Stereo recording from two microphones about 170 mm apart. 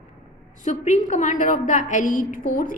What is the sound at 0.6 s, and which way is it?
A woman's voice, 45° left (ahead or behind).